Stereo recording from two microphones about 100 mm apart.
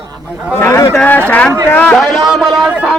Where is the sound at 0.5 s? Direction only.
25° left (ahead or behind).